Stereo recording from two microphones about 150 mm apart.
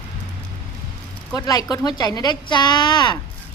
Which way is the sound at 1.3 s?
25° left (ahead or behind).